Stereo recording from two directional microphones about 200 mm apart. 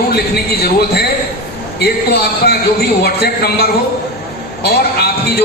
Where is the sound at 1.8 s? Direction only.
55° left (ahead or behind).